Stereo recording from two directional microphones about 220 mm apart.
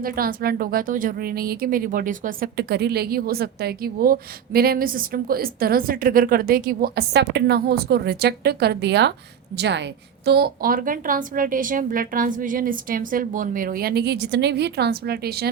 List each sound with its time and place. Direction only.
0.0 s a woman's voice: 40° right (ahead or behind)